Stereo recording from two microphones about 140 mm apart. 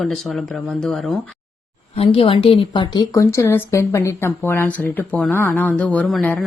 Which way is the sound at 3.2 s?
20° left (ahead or behind).